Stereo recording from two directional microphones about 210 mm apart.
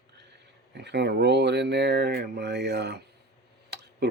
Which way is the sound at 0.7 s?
55° right (ahead or behind).